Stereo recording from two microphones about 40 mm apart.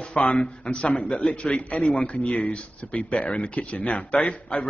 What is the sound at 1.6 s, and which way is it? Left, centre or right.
Speech, left.